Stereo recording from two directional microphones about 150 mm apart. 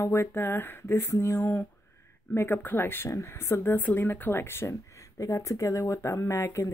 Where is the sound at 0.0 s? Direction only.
15° left (ahead or behind).